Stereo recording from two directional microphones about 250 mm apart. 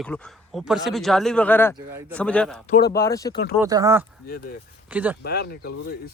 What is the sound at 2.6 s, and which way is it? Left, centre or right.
Speech, left.